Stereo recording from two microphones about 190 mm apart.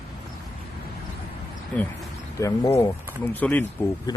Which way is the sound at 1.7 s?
5° left (ahead or behind).